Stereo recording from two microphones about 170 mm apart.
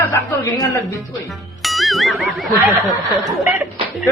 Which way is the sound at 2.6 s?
15° right (ahead or behind).